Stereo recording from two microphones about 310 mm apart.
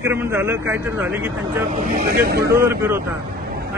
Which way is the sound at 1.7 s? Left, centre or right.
Right.